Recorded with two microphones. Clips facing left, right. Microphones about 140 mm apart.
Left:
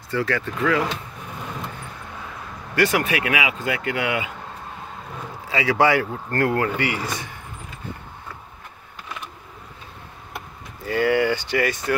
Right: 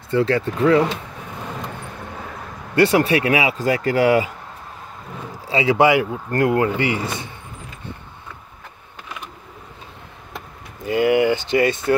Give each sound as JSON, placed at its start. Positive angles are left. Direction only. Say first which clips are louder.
{"t": 0.1, "sound": "speech", "louder": "right 6 dB", "side_deg": -25}
{"t": 2.7, "sound": "speech", "louder": "right 5 dB", "side_deg": -30}
{"t": 5.5, "sound": "speech", "louder": "right 3 dB", "side_deg": -25}
{"t": 10.8, "sound": "speech", "louder": "right 3 dB", "side_deg": -20}